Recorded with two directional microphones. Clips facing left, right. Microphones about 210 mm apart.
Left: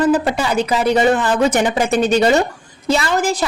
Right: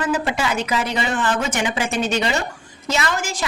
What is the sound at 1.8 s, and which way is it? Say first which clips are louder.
Speech: left 6 dB; 55° left (ahead or behind).